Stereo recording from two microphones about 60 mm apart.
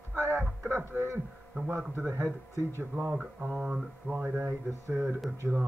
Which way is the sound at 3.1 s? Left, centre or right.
Right.